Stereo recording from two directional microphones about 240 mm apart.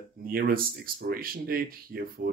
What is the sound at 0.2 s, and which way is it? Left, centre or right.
Speech, right.